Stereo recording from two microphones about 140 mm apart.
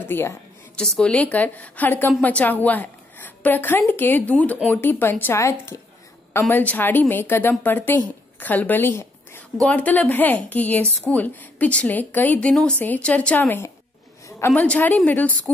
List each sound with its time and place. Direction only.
0.0 s a woman's voice: 15° left (ahead or behind)
0.7 s a woman's voice: 5° left (ahead or behind)